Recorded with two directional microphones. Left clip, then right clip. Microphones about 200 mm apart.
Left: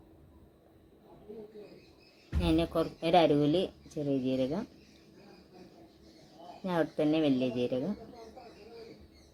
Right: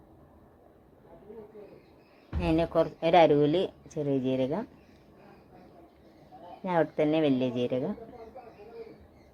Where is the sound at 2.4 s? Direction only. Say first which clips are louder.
Right 4 dB; 15° right (ahead or behind).